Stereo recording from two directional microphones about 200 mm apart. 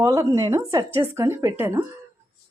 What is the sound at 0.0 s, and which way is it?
Speech, 15° right (ahead or behind).